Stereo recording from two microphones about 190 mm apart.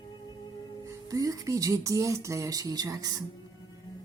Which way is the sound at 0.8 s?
15° right (ahead or behind).